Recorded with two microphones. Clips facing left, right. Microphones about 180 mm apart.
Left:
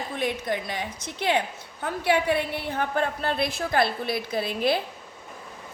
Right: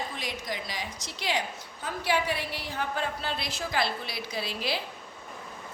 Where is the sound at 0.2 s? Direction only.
55° left (ahead or behind).